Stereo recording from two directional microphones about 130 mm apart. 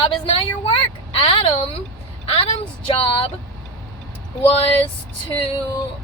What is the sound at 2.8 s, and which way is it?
Speech, 45° left (ahead or behind).